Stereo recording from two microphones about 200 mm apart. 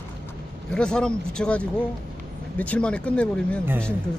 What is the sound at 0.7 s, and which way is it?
Speech, 5° left (ahead or behind).